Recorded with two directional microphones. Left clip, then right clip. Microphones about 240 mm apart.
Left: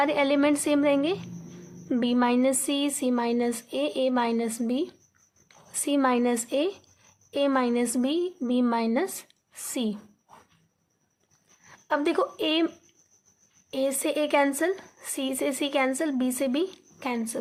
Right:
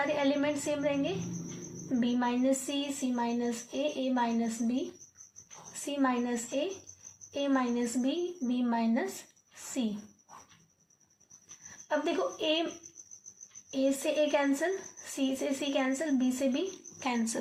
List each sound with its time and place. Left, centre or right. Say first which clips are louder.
0.0 s speech: left 7 dB; left
5.8 s speech: left 7 dB; left
11.9 s a woman's voice: left 6 dB; left
13.7 s a woman's voice: left 3 dB; left